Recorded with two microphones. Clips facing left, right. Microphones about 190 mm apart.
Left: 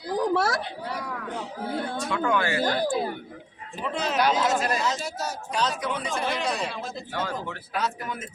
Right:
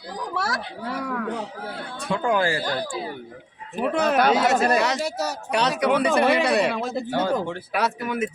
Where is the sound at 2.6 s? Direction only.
50° left (ahead or behind).